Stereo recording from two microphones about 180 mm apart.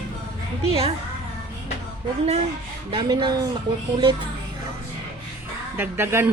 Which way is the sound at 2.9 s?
25° right (ahead or behind).